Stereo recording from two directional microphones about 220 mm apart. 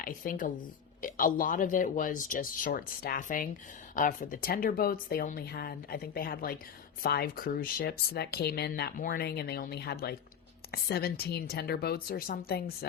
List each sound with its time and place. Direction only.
0.0 s speech: 40° left (ahead or behind)